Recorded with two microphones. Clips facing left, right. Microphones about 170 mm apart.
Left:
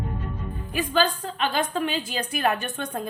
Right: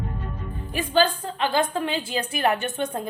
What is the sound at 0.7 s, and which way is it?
A woman's voice, 30° right (ahead or behind).